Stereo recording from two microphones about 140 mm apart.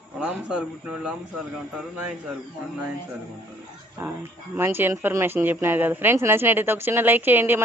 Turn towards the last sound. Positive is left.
turn(degrees=-15)  # may be behind; listen again after turning